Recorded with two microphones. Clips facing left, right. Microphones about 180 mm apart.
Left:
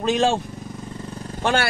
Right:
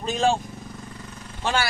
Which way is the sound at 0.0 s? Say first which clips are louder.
Left 3 dB; 80° left.